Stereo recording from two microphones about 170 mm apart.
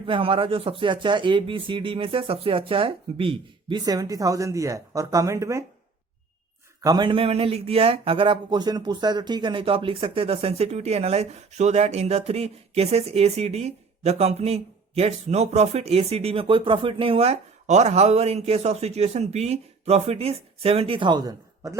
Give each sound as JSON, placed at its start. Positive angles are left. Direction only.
{"t": 0.0, "sound": "speech", "side_deg": -30}
{"t": 6.8, "sound": "speech", "side_deg": -25}